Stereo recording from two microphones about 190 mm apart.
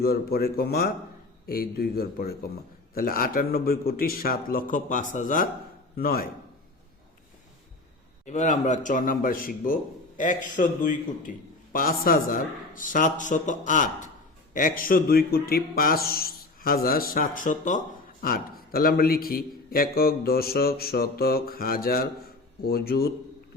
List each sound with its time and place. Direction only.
0.0 s speech: 55° left (ahead or behind)
8.2 s speech: 40° left (ahead or behind); by 23.1 s 55° left (ahead or behind)